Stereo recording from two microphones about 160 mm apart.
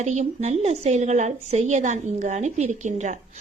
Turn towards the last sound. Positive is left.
turn(degrees=-50)  # may be behind; listen again after turning